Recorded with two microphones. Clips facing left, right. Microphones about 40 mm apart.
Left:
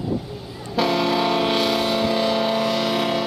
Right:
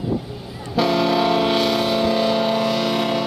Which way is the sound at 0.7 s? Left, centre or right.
Centre.